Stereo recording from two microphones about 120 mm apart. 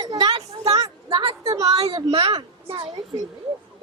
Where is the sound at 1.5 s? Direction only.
30° right (ahead or behind).